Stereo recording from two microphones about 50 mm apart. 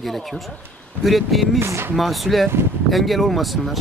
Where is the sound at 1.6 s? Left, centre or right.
Right.